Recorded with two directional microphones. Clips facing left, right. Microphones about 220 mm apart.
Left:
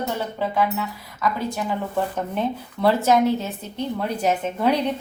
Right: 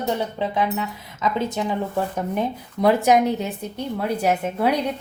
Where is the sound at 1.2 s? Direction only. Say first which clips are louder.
Right 2 dB; 25° right (ahead or behind).